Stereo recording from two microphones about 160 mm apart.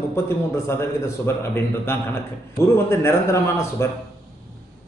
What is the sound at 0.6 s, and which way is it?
A man's voice, 15° left (ahead or behind).